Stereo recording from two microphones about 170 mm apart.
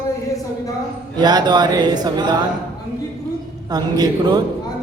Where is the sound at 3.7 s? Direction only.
20° right (ahead or behind).